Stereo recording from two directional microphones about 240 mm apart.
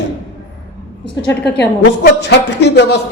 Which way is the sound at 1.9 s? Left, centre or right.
Left.